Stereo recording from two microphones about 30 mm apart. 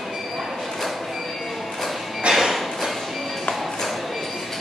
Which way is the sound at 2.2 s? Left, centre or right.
Right.